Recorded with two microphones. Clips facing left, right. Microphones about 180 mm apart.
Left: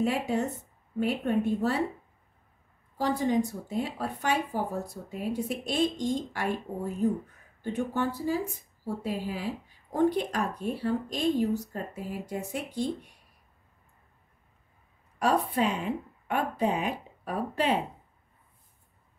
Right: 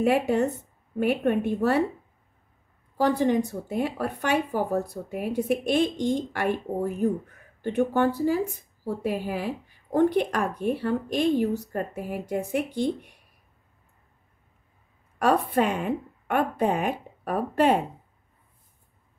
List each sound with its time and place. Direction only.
0.0 s speech: 65° right (ahead or behind)
3.0 s speech: 65° right (ahead or behind)
15.1 s speech: 55° right (ahead or behind)